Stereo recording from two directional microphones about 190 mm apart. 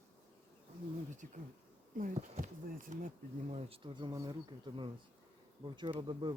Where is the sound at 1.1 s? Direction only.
40° right (ahead or behind).